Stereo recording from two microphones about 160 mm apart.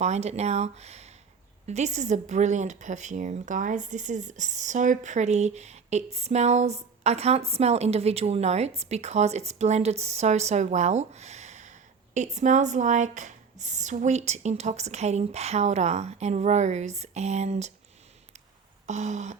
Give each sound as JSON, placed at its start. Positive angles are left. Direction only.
{"t": 0.0, "sound": "a woman's voice", "side_deg": -45}
{"t": 18.9, "sound": "a woman's voice", "side_deg": -45}